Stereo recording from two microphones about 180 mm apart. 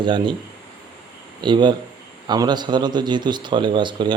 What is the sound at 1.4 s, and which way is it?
Speech, 25° right (ahead or behind).